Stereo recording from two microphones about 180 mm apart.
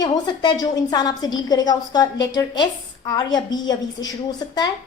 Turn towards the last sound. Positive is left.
turn(degrees=25)  # may be behind; listen again after turning